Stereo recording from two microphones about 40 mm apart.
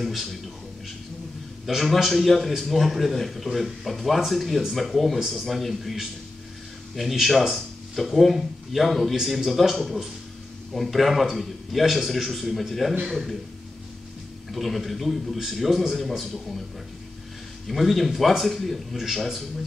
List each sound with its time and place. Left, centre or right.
0.0 s speech: centre
1.7 s speech: centre
14.5 s speech: centre
17.6 s speech: centre